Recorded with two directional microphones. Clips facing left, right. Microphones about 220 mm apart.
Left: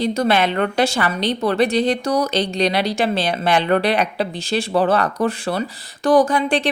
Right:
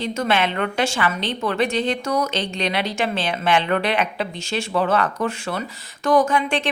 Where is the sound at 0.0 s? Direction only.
35° left (ahead or behind).